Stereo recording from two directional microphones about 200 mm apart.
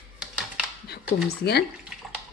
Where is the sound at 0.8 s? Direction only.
55° left (ahead or behind).